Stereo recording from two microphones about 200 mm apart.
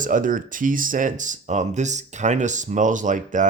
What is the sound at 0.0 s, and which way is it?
Speech, 40° right (ahead or behind).